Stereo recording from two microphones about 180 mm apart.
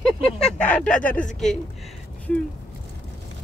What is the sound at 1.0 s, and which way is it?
Speech, 50° left (ahead or behind).